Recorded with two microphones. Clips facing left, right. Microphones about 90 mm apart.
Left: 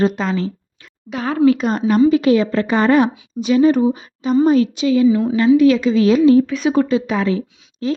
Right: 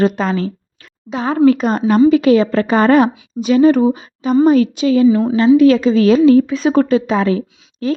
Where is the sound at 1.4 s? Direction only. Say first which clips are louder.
Right 2 dB; 45° right (ahead or behind).